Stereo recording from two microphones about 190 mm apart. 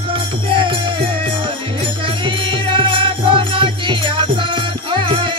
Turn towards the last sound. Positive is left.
turn(degrees=-25)  # may be behind; listen again after turning